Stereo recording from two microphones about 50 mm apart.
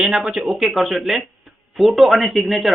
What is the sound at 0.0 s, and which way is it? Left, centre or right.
Speech, centre.